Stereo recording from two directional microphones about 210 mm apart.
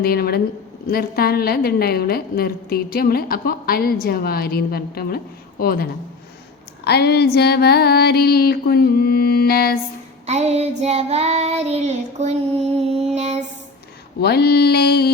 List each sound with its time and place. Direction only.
0.0 s a woman's voice: 45° left (ahead or behind)
10.2 s child singing: 30° right (ahead or behind)
14.2 s a woman's voice: 50° left (ahead or behind)